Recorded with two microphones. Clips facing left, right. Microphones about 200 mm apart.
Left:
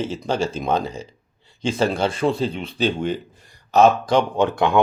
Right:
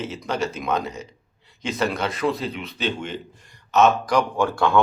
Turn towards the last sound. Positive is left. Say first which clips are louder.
# left 2 dB
turn(degrees=20)  # may be behind; listen again after turning